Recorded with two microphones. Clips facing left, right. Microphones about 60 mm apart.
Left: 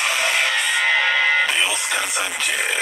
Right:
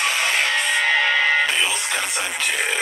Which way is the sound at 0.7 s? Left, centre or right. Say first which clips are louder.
Even; centre.